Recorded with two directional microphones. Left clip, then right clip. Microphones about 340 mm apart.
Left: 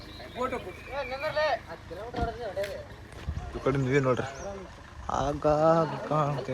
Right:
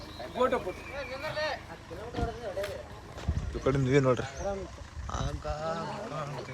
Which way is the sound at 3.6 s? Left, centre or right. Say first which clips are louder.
Even; centre.